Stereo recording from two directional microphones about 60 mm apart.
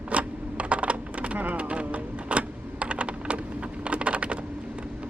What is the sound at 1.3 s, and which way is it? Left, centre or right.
Typing, right.